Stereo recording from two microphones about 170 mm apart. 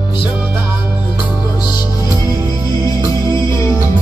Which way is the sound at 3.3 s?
20° left (ahead or behind).